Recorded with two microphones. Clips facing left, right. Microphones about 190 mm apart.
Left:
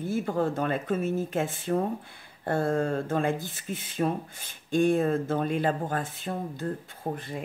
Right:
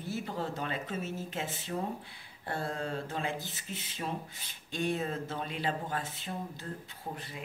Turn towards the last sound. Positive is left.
turn(degrees=50)  # may be behind; listen again after turning